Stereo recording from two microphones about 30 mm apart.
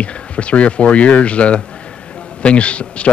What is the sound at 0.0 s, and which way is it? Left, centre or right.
Speech, left.